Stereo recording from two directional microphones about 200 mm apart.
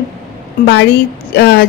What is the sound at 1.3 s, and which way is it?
Speech, 55° left (ahead or behind).